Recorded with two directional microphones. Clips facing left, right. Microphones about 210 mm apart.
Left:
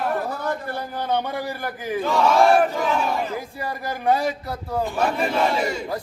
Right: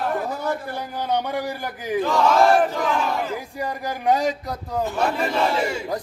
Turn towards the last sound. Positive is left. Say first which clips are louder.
# even
turn(degrees=-10)  # may be behind; listen again after turning